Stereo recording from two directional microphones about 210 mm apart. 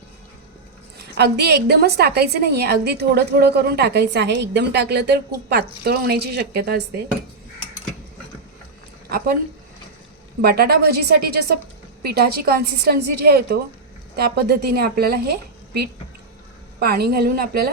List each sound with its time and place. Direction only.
0.9 s a woman's voice: 50° right (ahead or behind)
9.0 s speech: 45° right (ahead or behind)
10.4 s a woman's voice: 45° right (ahead or behind)